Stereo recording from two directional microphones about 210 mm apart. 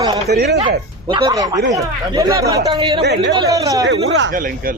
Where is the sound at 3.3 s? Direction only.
15° right (ahead or behind).